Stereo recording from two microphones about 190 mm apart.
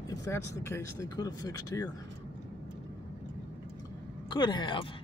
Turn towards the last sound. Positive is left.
turn(degrees=25)  # may be behind; listen again after turning